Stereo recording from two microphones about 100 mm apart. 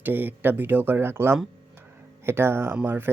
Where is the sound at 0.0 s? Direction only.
20° right (ahead or behind).